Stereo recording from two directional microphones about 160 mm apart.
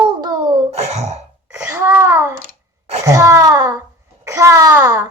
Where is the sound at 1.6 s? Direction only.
15° right (ahead or behind).